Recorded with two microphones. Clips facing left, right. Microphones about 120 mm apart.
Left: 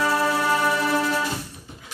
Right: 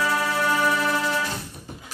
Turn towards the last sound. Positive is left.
turn(degrees=30)  # may be behind; listen again after turning